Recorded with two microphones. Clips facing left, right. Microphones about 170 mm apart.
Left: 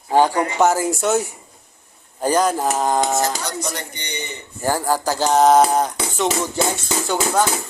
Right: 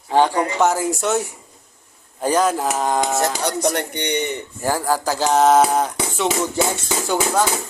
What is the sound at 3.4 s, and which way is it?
Speech, 65° right (ahead or behind).